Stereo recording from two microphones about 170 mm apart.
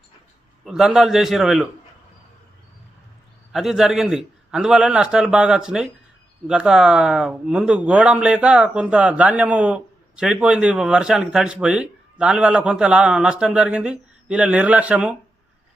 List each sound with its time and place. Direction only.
0.6 s a man's voice: 5° right (ahead or behind)
3.5 s a man's voice: centre (ahead or behind)